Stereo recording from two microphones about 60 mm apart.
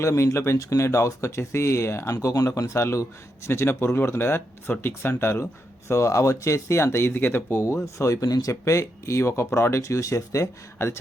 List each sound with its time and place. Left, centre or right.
0.0 s speech: left
2.2 s speech: left
5.9 s speech: left
7.6 s speech: left
9.8 s speech: left